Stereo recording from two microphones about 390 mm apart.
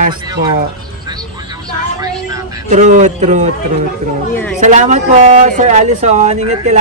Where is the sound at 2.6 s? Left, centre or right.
Centre.